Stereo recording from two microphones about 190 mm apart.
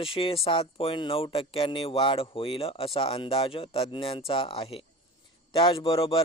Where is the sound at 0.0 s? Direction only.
30° left (ahead or behind).